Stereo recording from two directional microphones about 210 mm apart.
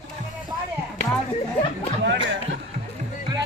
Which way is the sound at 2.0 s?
55° right (ahead or behind).